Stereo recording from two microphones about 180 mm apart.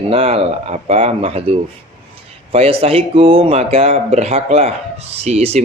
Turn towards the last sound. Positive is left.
turn(degrees=-35)  # may be behind; listen again after turning